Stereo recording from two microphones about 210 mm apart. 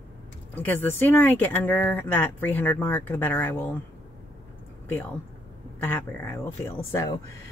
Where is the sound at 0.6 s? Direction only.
10° left (ahead or behind).